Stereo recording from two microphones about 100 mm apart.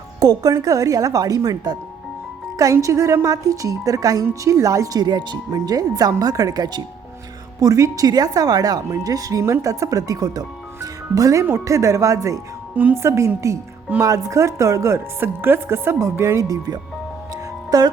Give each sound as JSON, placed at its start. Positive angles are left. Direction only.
{"t": 0.2, "sound": "a woman's voice", "side_deg": -40}
{"t": 2.8, "sound": "a woman's voice", "side_deg": -30}
{"t": 12.7, "sound": "speech", "side_deg": -15}
{"t": 13.0, "sound": "speech", "side_deg": -30}